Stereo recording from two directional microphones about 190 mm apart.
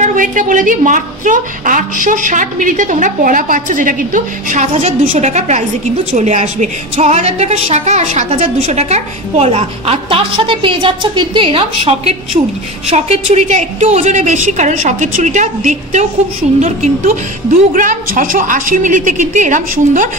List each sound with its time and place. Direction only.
0.0 s a woman's voice: 40° right (ahead or behind)